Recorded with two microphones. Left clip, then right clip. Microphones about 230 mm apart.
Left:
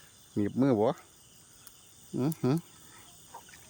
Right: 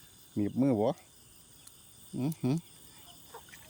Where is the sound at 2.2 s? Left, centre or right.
Centre.